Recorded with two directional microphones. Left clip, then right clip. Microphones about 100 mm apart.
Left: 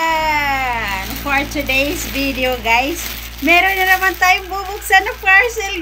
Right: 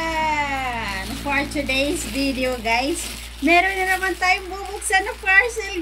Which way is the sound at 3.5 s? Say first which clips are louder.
Left 5 dB; 30° right (ahead or behind).